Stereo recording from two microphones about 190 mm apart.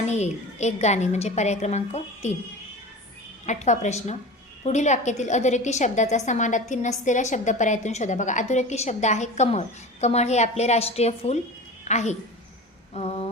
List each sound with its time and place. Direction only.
0.1 s a woman's voice: 35° left (ahead or behind)
3.4 s a woman's voice: 40° left (ahead or behind)